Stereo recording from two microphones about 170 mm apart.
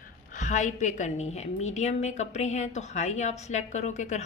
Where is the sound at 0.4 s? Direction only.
45° left (ahead or behind).